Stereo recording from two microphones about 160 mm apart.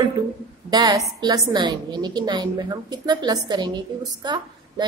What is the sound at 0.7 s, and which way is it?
A woman's voice, 25° right (ahead or behind).